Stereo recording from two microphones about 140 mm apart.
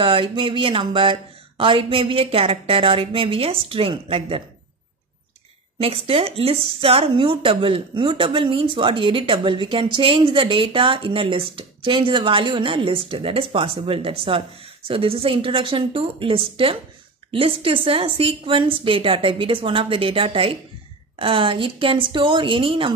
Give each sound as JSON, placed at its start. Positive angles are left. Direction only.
{"t": 0.0, "sound": "speech", "side_deg": -40}
{"t": 5.8, "sound": "speech", "side_deg": -45}